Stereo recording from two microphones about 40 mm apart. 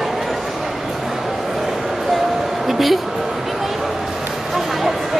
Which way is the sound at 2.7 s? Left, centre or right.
Centre.